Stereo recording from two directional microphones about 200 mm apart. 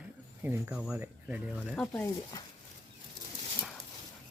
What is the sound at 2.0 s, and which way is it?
Speech, 20° left (ahead or behind).